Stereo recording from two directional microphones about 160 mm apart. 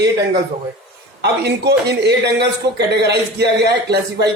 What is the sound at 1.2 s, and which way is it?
A man's voice, 90° right.